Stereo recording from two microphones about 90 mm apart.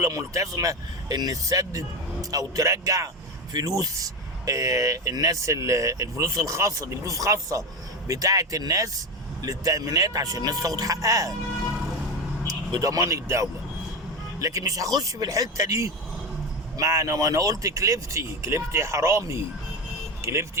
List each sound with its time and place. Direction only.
0.0 s speech: 35° right (ahead or behind)
12.7 s speech: 40° right (ahead or behind)